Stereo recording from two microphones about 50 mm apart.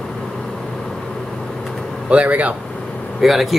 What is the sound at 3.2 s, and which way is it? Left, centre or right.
Speech, centre.